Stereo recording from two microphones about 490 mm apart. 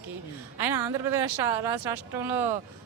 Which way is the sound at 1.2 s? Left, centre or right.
Right.